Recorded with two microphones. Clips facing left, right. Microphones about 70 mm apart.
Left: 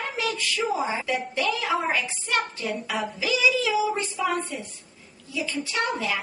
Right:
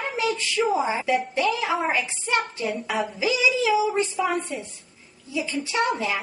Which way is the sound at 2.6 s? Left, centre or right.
Centre.